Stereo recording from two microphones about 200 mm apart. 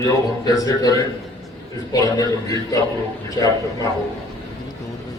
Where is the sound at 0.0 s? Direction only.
20° left (ahead or behind).